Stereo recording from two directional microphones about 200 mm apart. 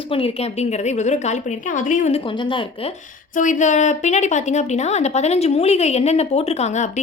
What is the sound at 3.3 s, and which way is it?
A woman's voice, 40° left (ahead or behind).